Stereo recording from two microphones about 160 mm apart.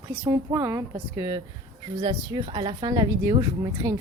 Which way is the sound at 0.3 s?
15° right (ahead or behind).